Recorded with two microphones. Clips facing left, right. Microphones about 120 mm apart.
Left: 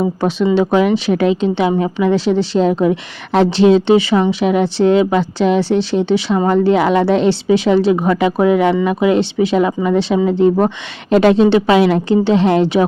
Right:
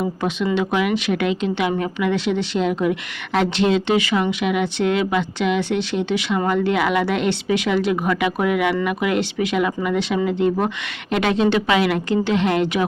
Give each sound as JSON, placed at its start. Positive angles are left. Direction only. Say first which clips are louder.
{"t": 0.0, "sound": "speech", "louder": "left 6 dB", "side_deg": 35}